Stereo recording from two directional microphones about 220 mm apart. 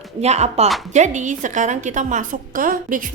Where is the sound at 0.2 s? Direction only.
30° right (ahead or behind).